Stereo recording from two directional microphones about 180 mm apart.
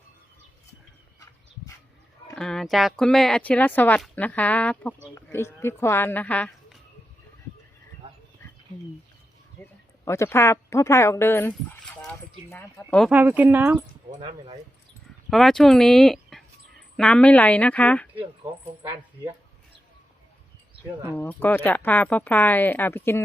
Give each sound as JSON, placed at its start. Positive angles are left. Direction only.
{"t": 2.3, "sound": "speech", "side_deg": 5}
{"t": 9.6, "sound": "a sound", "side_deg": 10}
{"t": 10.1, "sound": "speech", "side_deg": 15}
{"t": 13.1, "sound": "speech", "side_deg": -10}
{"t": 14.2, "sound": "speech", "side_deg": -30}
{"t": 15.3, "sound": "speech", "side_deg": 0}
{"t": 18.8, "sound": "speech", "side_deg": -25}
{"t": 21.2, "sound": "speech", "side_deg": 10}